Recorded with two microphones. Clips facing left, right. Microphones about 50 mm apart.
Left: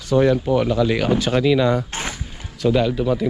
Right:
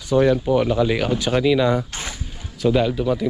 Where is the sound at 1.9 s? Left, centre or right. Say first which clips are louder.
Left 4 dB; left.